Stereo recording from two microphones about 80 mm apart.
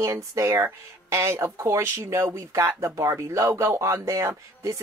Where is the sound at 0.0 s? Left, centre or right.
Right.